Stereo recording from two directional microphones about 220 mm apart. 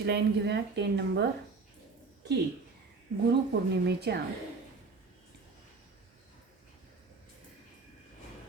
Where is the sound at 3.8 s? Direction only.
50° right (ahead or behind).